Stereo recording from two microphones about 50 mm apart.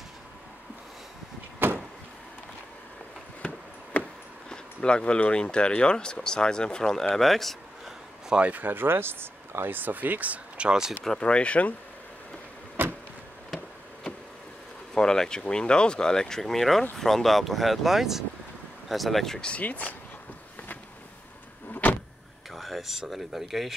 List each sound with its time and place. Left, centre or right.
1.6 s vehicle: right
3.9 s a sound: left
4.8 s speech: centre
8.3 s speech: right
9.8 s speech: right
10.7 s speech: centre
11.1 s speech: left
12.8 s vehicle: right
15.0 s speech: centre
19.6 s speech: left
22.5 s speech: centre